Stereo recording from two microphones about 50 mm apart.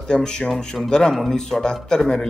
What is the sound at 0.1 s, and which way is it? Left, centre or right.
Speech, centre.